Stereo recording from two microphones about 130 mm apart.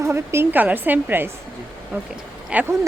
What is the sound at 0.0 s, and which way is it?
A woman's voice, 20° right (ahead or behind).